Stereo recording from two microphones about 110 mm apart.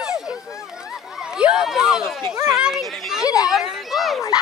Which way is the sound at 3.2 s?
30° left (ahead or behind).